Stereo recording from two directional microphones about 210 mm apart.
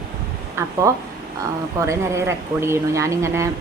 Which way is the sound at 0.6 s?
15° right (ahead or behind).